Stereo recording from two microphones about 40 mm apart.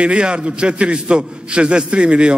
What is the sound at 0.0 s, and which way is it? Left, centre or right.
A man's voice, right.